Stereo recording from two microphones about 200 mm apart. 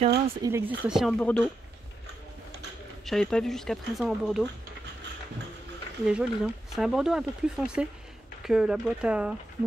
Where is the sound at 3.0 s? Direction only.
Centre (ahead or behind).